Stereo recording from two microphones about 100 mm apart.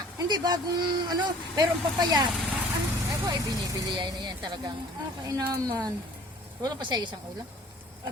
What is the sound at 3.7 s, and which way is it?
Speech, 45° right (ahead or behind).